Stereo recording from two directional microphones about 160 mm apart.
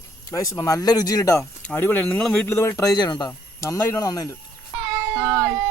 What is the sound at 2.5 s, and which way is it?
Speech, 15° left (ahead or behind).